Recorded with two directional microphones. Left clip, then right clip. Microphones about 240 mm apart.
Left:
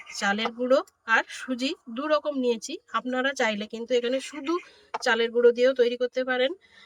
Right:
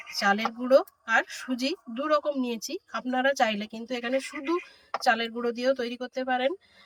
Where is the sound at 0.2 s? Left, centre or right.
Centre.